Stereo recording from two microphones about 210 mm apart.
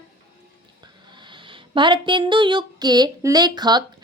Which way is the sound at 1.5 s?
20° right (ahead or behind).